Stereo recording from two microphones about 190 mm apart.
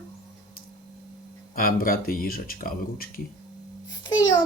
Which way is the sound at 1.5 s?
50° left (ahead or behind).